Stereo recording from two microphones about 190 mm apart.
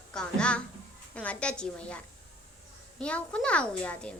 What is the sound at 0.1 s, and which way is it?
Music, 5° left (ahead or behind).